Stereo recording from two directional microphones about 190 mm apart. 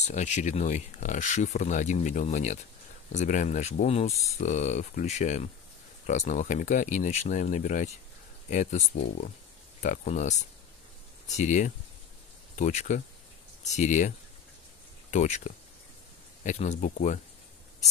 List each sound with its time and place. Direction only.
0.0 s speech: 40° left (ahead or behind)